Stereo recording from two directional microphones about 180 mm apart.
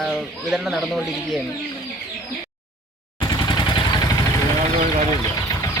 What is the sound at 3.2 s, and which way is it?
Machine gun, 25° left (ahead or behind).